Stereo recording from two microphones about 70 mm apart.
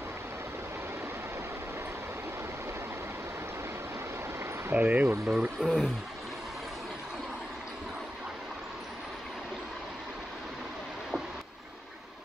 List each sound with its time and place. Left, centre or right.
4.6 s speech: right
5.3 s speech: centre